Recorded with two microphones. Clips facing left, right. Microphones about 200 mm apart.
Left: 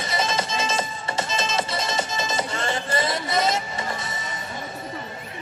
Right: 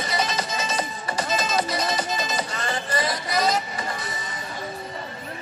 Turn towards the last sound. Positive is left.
turn(degrees=25)  # may be behind; listen again after turning